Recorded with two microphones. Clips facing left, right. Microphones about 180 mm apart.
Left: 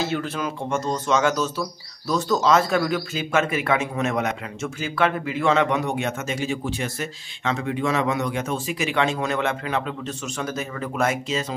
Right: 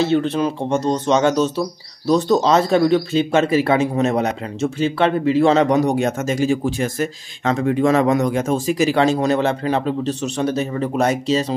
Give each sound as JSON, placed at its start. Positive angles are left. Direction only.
{"t": 0.0, "sound": "speech", "side_deg": -30}